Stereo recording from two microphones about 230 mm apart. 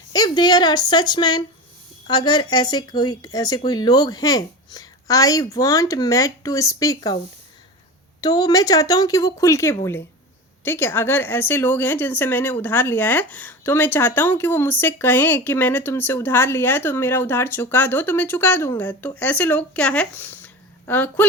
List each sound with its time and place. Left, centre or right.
0.1 s speech: centre
8.2 s speech: centre